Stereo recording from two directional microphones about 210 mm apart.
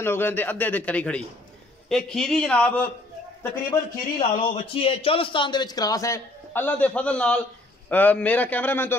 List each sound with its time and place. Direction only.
0.0 s a man's voice: 10° left (ahead or behind)
3.7 s a man's voice: 25° left (ahead or behind); by 8.9 s 10° left (ahead or behind)